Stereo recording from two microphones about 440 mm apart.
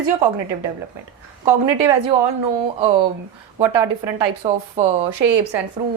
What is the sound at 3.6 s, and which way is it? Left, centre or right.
A woman's voice, right.